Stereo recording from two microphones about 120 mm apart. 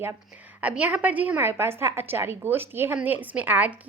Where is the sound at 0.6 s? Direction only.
10° right (ahead or behind).